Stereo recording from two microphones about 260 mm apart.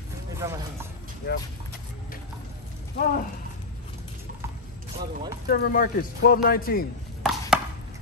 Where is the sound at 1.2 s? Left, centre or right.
Left.